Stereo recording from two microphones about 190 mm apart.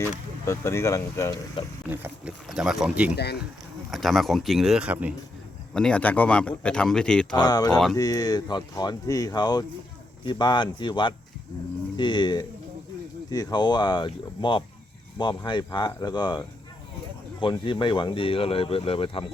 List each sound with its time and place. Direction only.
0.4 s speech: 15° left (ahead or behind)
1.9 s speech: 5° right (ahead or behind)
5.7 s speech: 5° left (ahead or behind)
7.3 s speech: 20° left (ahead or behind)
17.4 s speech: 25° left (ahead or behind)